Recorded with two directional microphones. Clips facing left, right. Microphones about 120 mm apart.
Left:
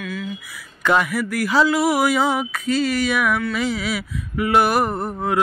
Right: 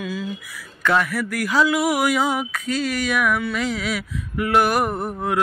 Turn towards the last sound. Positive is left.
turn(degrees=0)  # may be behind; listen again after turning